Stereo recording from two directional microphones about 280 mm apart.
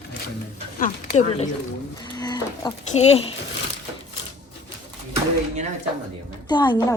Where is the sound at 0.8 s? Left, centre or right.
Left.